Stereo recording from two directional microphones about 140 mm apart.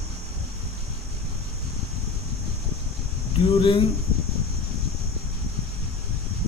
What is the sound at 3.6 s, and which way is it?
Speech, 35° left (ahead or behind).